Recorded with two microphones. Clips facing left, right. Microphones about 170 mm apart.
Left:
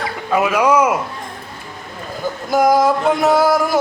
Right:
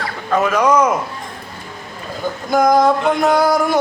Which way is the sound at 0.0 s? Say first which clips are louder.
Even; 10° left (ahead or behind).